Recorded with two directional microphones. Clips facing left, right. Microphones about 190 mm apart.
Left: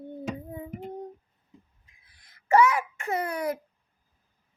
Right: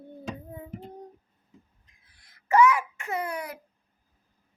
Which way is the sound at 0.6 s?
15° left (ahead or behind).